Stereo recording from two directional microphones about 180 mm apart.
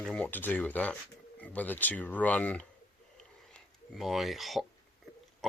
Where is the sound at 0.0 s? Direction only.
5° left (ahead or behind).